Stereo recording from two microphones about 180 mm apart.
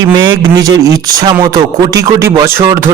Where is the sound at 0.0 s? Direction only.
25° right (ahead or behind).